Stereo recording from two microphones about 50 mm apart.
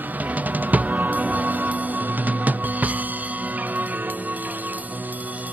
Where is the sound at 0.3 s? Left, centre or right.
Right.